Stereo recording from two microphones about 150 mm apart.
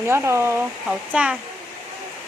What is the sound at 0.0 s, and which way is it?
Speech, 15° right (ahead or behind).